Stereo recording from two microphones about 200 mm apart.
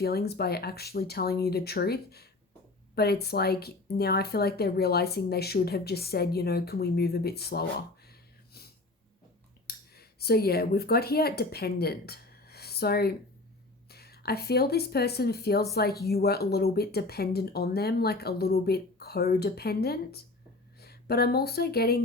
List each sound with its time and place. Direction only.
0.0 s speech: 50° left (ahead or behind)
9.6 s speech: 50° left (ahead or behind)